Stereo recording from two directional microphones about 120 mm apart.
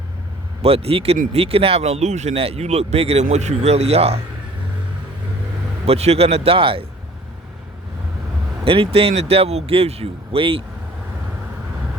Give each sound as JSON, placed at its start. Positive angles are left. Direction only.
{"t": 0.6, "sound": "speech", "side_deg": -55}
{"t": 5.8, "sound": "speech", "side_deg": -60}
{"t": 8.6, "sound": "speech", "side_deg": -50}